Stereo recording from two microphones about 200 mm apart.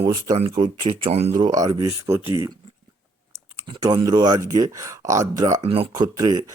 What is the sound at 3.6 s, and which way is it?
Speech, 20° right (ahead or behind).